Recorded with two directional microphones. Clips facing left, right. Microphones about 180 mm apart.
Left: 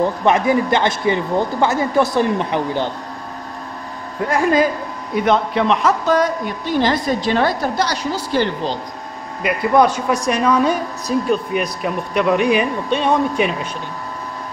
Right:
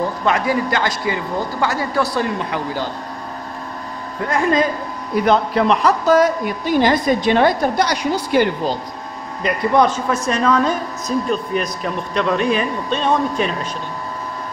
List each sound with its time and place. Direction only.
0.2 s speech: 20° left (ahead or behind)
5.1 s a woman's voice: centre (ahead or behind)
9.4 s a woman's voice: 5° left (ahead or behind)